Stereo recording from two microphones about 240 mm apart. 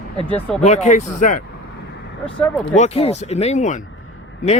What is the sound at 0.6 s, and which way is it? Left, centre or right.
Speech, left.